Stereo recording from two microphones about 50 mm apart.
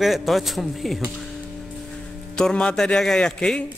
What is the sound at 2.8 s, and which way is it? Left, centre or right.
Speech, centre.